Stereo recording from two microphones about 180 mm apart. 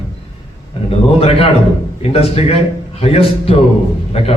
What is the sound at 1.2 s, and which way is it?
A man's voice, 30° left (ahead or behind).